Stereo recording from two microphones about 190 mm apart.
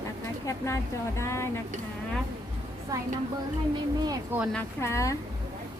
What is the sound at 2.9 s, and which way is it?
Speech, 20° right (ahead or behind).